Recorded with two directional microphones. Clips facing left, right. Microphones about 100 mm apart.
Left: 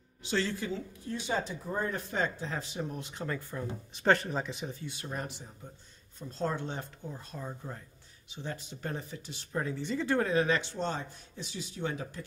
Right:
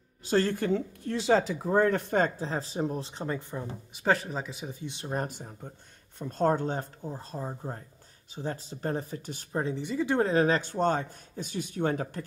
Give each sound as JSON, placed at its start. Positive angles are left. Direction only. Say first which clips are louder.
{"t": 0.2, "sound": "speech", "louder": "right 6 dB", "side_deg": -45}
{"t": 3.9, "sound": "speech", "louder": "even", "side_deg": -5}
{"t": 4.7, "sound": "speech", "louder": "right 3 dB", "side_deg": -20}
{"t": 5.1, "sound": "speech", "louder": "right 9 dB", "side_deg": -45}
{"t": 9.5, "sound": "speech", "louder": "right 3 dB", "side_deg": -30}
{"t": 9.8, "sound": "speech", "louder": "right 3 dB", "side_deg": -10}
{"t": 10.2, "sound": "speech", "louder": "right 4 dB", "side_deg": -40}